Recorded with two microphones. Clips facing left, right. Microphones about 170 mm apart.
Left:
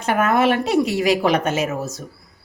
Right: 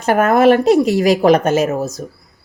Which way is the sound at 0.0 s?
40° right (ahead or behind).